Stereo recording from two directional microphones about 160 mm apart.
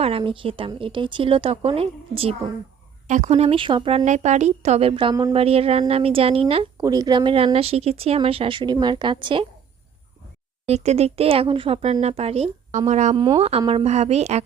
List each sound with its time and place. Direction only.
0.0 s speech: 35° right (ahead or behind)
3.1 s speech: 45° right (ahead or behind)
6.8 s speech: 25° right (ahead or behind)
10.7 s speech: 40° right (ahead or behind)
13.1 s speech: 25° right (ahead or behind); by 14.4 s 45° right (ahead or behind)